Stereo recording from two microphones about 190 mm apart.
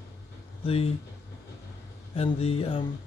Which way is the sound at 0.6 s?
30° left (ahead or behind).